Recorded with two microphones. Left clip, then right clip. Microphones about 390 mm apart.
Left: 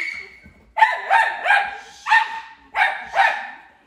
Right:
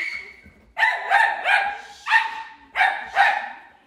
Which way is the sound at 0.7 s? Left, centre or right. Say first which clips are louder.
Left 3 dB; centre.